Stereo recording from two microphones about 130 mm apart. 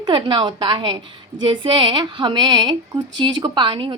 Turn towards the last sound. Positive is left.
turn(degrees=-40)  # may be behind; listen again after turning